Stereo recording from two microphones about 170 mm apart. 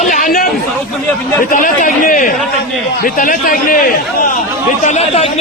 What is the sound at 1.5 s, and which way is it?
A man's voice, 50° left (ahead or behind).